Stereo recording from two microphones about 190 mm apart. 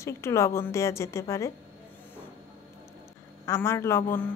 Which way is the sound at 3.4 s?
15° left (ahead or behind).